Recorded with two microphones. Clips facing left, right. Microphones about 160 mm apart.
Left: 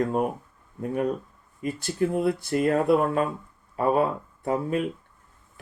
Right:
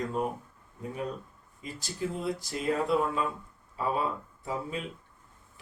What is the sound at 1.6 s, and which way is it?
Speech, 60° left (ahead or behind).